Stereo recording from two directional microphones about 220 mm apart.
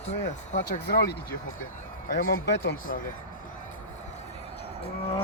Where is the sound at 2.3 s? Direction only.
50° left (ahead or behind).